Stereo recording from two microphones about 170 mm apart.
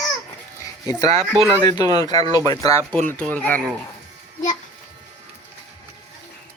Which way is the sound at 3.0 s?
10° left (ahead or behind).